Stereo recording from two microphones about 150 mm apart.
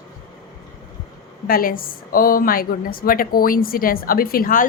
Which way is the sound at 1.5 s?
75° left (ahead or behind).